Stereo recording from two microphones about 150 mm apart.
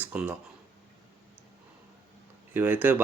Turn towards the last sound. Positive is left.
turn(degrees=-15)  # may be behind; listen again after turning